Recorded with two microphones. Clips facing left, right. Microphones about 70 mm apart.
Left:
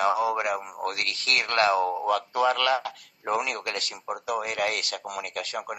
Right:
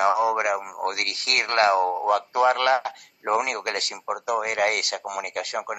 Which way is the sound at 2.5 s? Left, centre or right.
Right.